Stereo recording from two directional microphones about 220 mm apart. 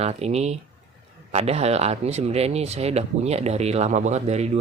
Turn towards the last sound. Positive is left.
turn(degrees=-30)  # may be behind; listen again after turning